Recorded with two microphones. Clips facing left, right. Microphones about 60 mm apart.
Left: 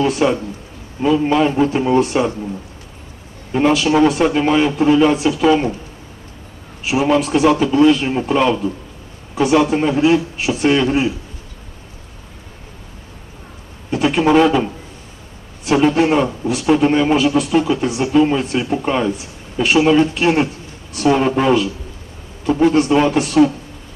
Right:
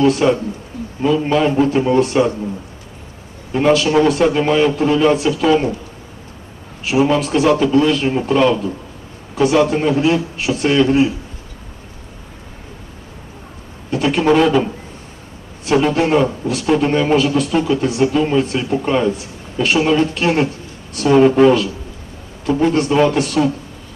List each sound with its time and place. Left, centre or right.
0.0 s a man's voice: centre
3.5 s a man's voice: centre
6.8 s a man's voice: centre
9.6 s a man's voice: centre
13.8 s a man's voice: centre